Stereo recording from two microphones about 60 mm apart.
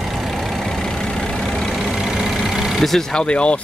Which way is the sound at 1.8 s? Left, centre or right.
Centre.